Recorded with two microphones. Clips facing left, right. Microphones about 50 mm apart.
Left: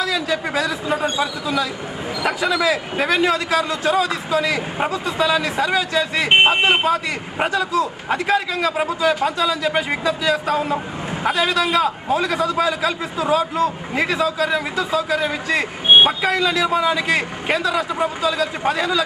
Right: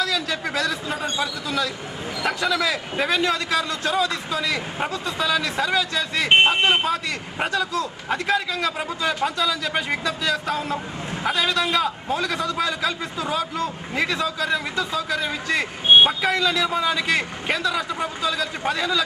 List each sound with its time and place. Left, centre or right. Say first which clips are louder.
0.0 s a man's voice: left 3 dB; centre
16.0 s a man's voice: left 2 dB; left